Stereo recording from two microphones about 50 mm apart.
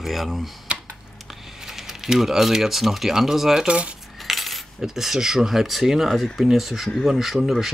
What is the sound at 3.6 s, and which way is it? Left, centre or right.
Keys jangling, right.